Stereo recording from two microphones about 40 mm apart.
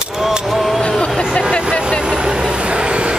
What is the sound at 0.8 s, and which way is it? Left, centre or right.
Vehicle, left.